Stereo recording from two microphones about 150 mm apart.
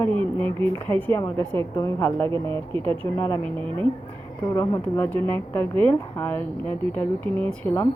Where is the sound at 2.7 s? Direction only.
35° right (ahead or behind).